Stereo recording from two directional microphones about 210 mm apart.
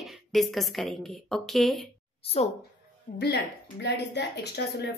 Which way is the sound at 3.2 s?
55° left (ahead or behind).